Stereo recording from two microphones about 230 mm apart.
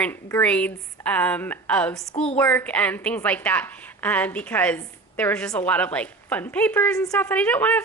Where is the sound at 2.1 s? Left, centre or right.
Left.